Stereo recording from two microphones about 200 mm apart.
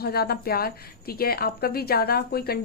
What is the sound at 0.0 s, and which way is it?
A woman's voice, 50° left (ahead or behind).